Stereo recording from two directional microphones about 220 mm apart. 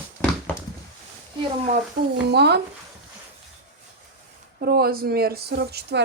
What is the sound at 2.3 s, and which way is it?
Speech, 50° right (ahead or behind).